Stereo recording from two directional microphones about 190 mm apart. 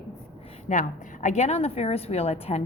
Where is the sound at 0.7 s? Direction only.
40° left (ahead or behind).